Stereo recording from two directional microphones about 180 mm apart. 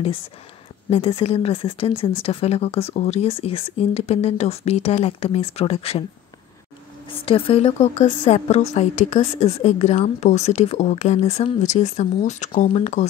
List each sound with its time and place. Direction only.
0.8 s speech: 35° left (ahead or behind)
7.2 s speech: 30° left (ahead or behind)